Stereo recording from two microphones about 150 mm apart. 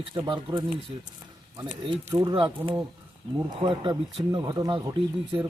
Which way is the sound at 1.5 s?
30° right (ahead or behind).